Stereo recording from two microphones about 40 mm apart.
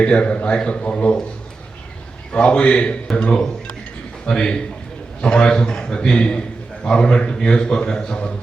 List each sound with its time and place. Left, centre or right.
0.0 s a man's voice: left
2.3 s a man's voice: left
3.3 s a man's voice: centre